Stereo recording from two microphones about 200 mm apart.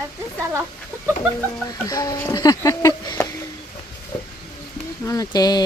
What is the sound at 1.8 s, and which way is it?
Speech, 20° left (ahead or behind).